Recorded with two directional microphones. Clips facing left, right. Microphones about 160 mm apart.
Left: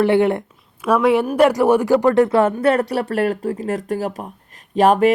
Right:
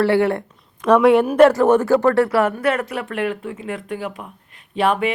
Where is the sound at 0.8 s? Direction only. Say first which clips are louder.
Right 3 dB; 5° left (ahead or behind).